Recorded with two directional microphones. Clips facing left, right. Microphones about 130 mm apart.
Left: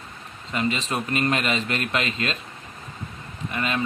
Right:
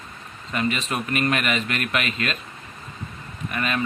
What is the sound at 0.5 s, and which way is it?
A man's voice, 25° left (ahead or behind).